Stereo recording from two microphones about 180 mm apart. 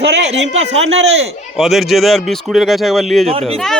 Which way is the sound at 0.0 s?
70° right (ahead or behind).